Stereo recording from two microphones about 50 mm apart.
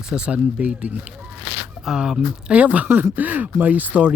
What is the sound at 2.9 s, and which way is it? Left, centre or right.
Speech, right.